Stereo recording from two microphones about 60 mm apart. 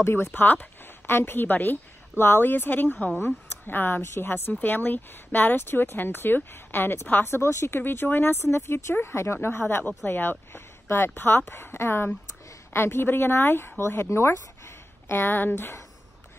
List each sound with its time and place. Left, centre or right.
0.0 s a woman's voice: left
10.5 s a sound: left
11.1 s a woman's voice: left
15.0 s a woman's voice: left